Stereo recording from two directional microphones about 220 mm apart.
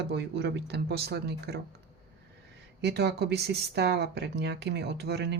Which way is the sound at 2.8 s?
50° right (ahead or behind).